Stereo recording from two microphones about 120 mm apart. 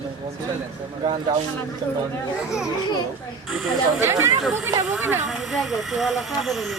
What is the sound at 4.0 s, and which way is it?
Speech, 20° right (ahead or behind).